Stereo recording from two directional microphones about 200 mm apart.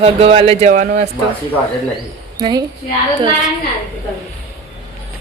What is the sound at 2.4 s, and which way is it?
Speech, 20° right (ahead or behind).